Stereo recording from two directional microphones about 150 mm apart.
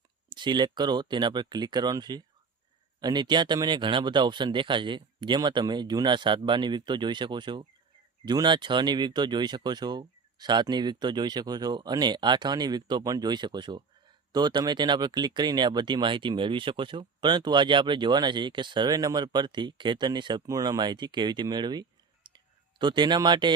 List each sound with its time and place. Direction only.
0.3 s speech: 30° right (ahead or behind)